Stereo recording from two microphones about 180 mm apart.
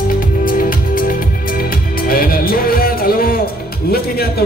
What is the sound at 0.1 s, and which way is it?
Music, 50° left (ahead or behind).